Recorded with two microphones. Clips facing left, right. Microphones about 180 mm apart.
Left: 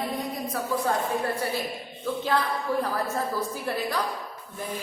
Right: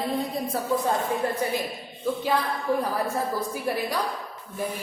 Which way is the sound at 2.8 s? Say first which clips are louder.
Right 1 dB; 15° right (ahead or behind).